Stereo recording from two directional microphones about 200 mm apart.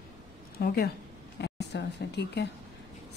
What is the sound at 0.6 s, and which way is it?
Speech, 50° left (ahead or behind).